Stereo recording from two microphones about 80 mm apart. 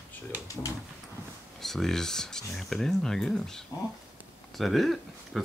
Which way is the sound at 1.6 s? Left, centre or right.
Centre.